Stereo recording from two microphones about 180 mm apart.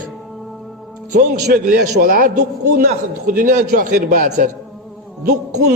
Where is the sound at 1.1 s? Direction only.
50° right (ahead or behind).